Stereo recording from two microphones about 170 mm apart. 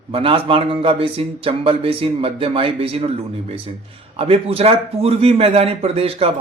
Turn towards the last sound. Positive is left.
turn(degrees=-35)  # may be behind; listen again after turning